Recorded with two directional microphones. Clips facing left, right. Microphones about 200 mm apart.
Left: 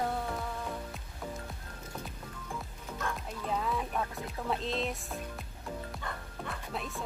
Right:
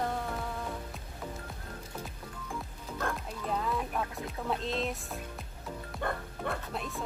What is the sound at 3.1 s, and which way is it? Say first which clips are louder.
Speech: even; centre (ahead or behind).